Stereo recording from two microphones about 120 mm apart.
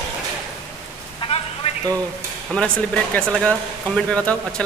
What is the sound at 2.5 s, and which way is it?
Speech, 5° left (ahead or behind).